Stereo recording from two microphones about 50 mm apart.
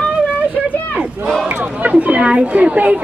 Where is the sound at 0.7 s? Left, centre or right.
Right.